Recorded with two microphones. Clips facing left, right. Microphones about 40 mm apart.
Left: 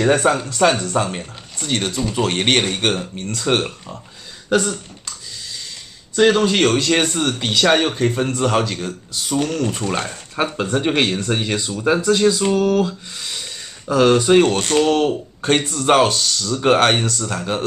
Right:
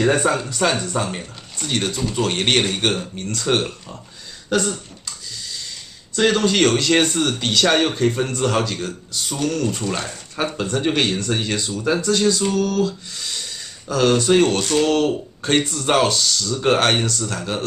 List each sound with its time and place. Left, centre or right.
0.2 s speech: left
0.6 s speech: centre
6.1 s speech: centre